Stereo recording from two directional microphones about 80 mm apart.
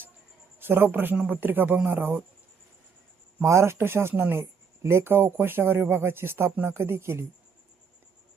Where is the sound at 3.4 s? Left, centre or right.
Right.